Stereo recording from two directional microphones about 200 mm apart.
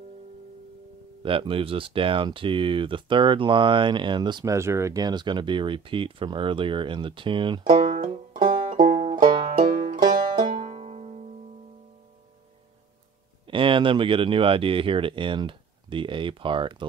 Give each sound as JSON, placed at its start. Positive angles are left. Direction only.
{"t": 1.2, "sound": "speech", "side_deg": -25}
{"t": 9.6, "sound": "music", "side_deg": -40}
{"t": 10.5, "sound": "music", "side_deg": -30}
{"t": 13.5, "sound": "speech", "side_deg": -25}